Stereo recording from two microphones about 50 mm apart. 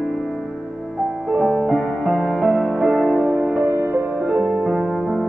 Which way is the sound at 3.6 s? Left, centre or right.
Right.